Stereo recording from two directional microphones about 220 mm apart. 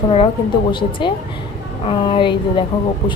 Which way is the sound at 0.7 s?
20° left (ahead or behind).